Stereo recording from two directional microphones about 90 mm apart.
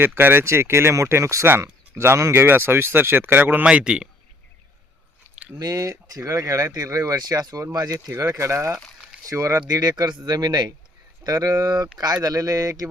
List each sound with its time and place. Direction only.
0.0 s speech: 25° right (ahead or behind)
3.7 s a man's voice: 10° right (ahead or behind)
5.5 s speech: 40° right (ahead or behind)
9.6 s speech: 45° right (ahead or behind)